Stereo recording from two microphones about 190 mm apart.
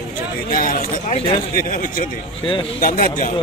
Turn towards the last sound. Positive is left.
turn(degrees=45)  # may be behind; listen again after turning